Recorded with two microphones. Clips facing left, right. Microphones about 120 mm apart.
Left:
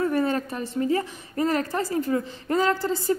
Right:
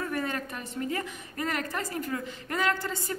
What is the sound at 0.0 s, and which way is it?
A woman's voice, 30° left (ahead or behind).